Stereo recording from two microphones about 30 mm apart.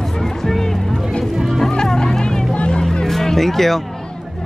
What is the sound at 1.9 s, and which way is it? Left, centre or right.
Music, left.